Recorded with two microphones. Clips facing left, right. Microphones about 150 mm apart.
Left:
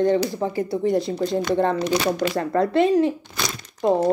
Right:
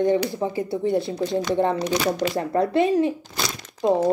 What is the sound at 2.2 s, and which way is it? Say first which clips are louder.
Speech: left 1 dB; 20° right (ahead or behind).